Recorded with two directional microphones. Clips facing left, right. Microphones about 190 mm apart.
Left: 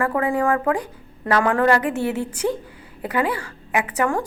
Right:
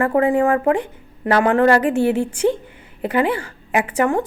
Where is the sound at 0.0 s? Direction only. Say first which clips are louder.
Right 5 dB; 25° right (ahead or behind).